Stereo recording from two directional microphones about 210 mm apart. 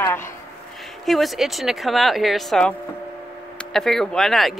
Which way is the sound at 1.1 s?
Centre (ahead or behind).